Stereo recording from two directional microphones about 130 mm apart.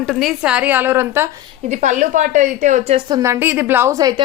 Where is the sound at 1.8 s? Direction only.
75° right (ahead or behind).